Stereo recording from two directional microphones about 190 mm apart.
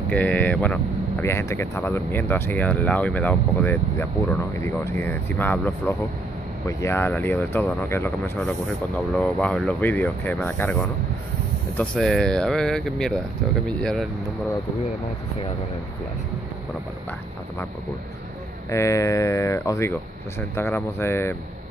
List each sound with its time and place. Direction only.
0.1 s speech: 10° left (ahead or behind)
18.7 s speech: 15° left (ahead or behind)